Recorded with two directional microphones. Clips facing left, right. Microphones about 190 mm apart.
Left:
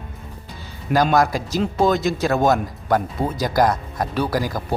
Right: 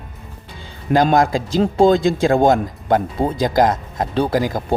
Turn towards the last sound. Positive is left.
turn(degrees=-20)  # may be behind; listen again after turning